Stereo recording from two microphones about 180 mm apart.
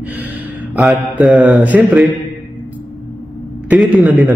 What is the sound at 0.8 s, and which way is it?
A man's voice, 5° right (ahead or behind).